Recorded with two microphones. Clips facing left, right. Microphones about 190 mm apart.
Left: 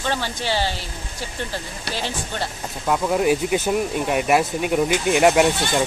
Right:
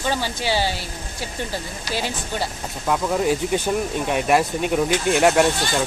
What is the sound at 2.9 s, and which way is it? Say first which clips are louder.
Speech: left 1 dB; 5° left (ahead or behind).